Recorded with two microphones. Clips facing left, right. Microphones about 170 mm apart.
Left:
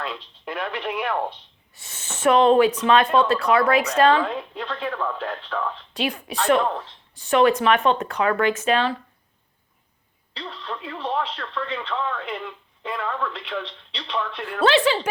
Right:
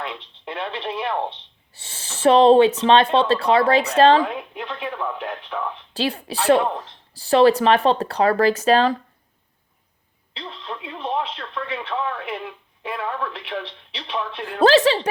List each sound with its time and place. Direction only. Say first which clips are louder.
0.0 s speech: even; 25° right (ahead or behind)
4.2 s speech: right 1 dB; 15° right (ahead or behind)
5.9 s speech: right 5 dB; 35° right (ahead or behind)
6.6 s speech: right 1 dB; 15° right (ahead or behind)
7.1 s speech: right 3 dB; 35° right (ahead or behind)
10.3 s speech: even; 20° right (ahead or behind)
14.6 s speech: right 4 dB; 40° right (ahead or behind)